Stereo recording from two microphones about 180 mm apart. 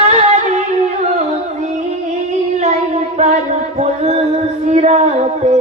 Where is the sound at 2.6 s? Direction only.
40° right (ahead or behind).